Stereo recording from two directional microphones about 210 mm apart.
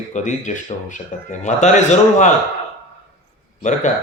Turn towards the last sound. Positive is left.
turn(degrees=35)  # may be behind; listen again after turning